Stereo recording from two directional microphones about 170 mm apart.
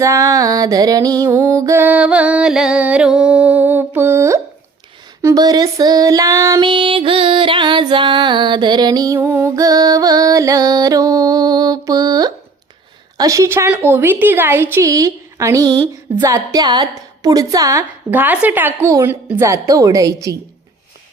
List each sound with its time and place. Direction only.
0.0 s music: 20° right (ahead or behind)
5.2 s female singing: 20° right (ahead or behind)
13.1 s music: 20° right (ahead or behind)
16.1 s female singing: 20° right (ahead or behind)